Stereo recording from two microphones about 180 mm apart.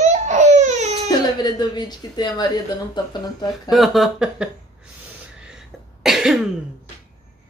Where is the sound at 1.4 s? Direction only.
25° left (ahead or behind).